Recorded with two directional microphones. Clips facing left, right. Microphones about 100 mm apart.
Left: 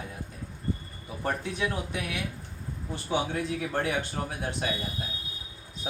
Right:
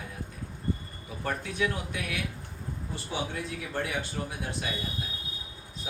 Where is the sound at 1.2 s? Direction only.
25° left (ahead or behind).